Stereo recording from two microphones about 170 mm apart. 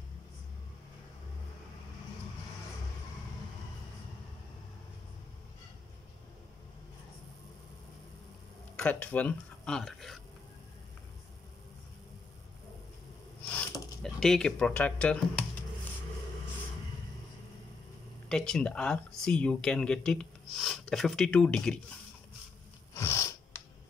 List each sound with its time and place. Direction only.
8.7 s speech: 10° left (ahead or behind)
13.5 s speech: 10° left (ahead or behind)
18.3 s speech: 5° left (ahead or behind)
22.9 s a sound: 20° left (ahead or behind)